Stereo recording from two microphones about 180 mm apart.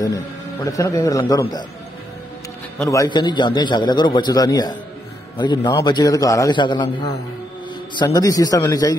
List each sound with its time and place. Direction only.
0.0 s a man's voice: 20° left (ahead or behind)
2.8 s a man's voice: 15° left (ahead or behind)